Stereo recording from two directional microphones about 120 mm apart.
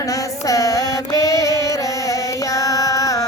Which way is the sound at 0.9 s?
30° left (ahead or behind).